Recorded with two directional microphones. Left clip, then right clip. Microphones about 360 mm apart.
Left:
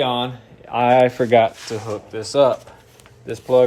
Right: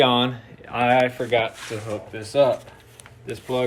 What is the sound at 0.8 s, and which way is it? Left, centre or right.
Speech, left.